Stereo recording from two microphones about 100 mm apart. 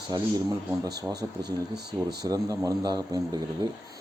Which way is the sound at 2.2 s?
35° right (ahead or behind).